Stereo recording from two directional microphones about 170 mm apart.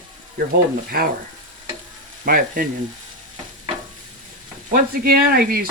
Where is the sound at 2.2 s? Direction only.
55° right (ahead or behind).